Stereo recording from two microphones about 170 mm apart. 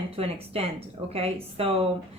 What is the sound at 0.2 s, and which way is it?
A woman's voice, 35° right (ahead or behind).